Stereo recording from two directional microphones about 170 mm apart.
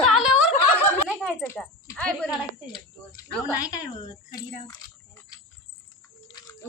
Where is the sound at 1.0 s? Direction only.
Centre (ahead or behind).